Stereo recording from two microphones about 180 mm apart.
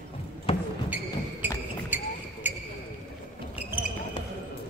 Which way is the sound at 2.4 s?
10° right (ahead or behind).